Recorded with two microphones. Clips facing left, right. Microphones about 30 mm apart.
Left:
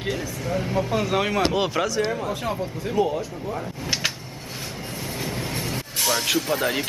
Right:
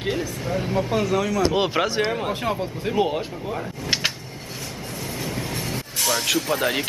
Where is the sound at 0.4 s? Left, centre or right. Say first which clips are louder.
Right 1 dB; centre.